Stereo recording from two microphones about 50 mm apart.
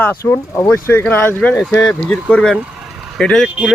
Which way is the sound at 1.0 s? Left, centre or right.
Left.